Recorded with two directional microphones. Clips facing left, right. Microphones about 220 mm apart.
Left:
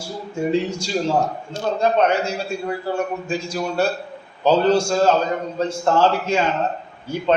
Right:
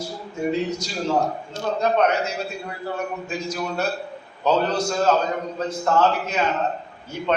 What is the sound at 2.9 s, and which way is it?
A man's voice, 30° left (ahead or behind).